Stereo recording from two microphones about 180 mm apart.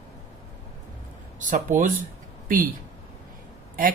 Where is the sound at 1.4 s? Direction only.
45° right (ahead or behind).